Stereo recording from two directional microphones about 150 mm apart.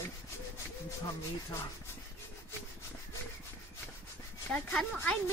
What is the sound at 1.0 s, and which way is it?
Speech, 15° left (ahead or behind).